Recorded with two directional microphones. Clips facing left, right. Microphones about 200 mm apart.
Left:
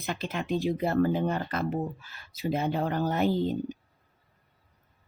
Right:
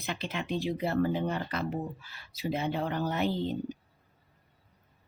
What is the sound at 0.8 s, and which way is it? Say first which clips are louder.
Speech: left 2 dB; 50° left (ahead or behind).